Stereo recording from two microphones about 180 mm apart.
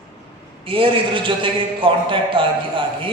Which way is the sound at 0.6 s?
30° right (ahead or behind).